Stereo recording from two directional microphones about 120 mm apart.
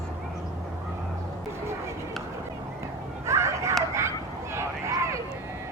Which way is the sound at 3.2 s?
25° right (ahead or behind).